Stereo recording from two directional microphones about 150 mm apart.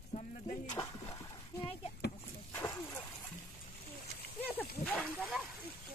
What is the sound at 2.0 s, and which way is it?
Vehicle, 90° left.